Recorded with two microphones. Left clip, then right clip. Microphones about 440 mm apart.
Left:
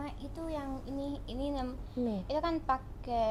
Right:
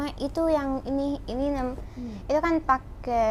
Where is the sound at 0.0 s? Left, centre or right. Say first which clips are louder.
Right 15 dB; right.